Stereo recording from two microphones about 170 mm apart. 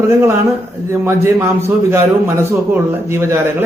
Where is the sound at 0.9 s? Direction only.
15° right (ahead or behind).